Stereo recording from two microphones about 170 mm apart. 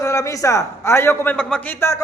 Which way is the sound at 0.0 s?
15° left (ahead or behind).